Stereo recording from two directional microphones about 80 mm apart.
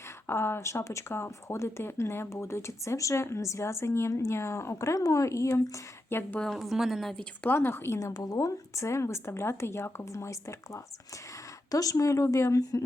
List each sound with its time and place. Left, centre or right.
0.3 s speech: left
6.1 s speech: left
6.4 s a woman's voice: centre
7.4 s speech: left
7.9 s speech: left
11.7 s speech: left